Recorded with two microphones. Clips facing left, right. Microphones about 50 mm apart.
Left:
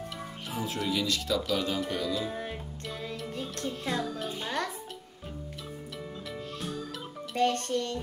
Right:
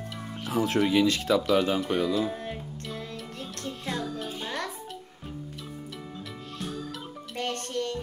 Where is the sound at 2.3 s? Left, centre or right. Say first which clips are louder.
Right 1 dB; centre.